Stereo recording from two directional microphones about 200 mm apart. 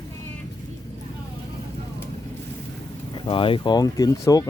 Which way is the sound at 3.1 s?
25° left (ahead or behind).